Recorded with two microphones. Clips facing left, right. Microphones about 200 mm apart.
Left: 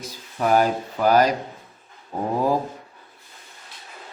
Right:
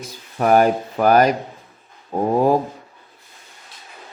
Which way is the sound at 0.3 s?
55° right (ahead or behind).